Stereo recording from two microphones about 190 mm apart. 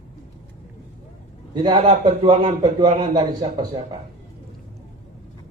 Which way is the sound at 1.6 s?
25° right (ahead or behind).